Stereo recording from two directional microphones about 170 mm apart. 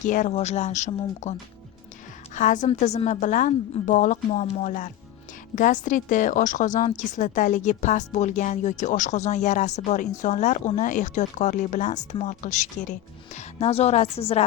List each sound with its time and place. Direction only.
0.0 s a woman's voice: 50° left (ahead or behind)